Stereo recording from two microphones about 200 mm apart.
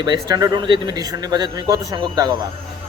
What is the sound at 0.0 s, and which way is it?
Speech, 20° right (ahead or behind).